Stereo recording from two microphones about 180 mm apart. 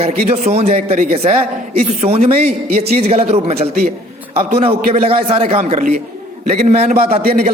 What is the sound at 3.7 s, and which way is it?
Speech, 55° right (ahead or behind).